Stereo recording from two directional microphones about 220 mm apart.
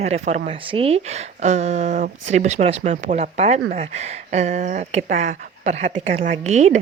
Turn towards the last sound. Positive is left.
turn(degrees=-30)  # may be behind; listen again after turning